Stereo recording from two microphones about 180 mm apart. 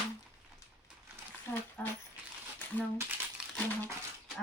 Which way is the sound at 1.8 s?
5° left (ahead or behind).